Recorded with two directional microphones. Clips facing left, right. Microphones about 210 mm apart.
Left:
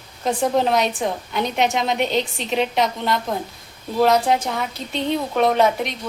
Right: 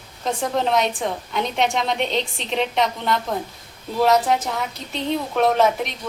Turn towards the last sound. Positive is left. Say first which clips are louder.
# left 1 dB
turn(degrees=0)  # may be behind; listen again after turning